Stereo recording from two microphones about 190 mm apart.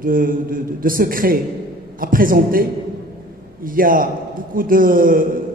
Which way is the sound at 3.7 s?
45° right (ahead or behind).